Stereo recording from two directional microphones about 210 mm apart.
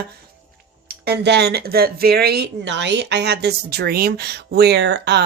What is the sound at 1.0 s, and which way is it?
Speech, 50° right (ahead or behind).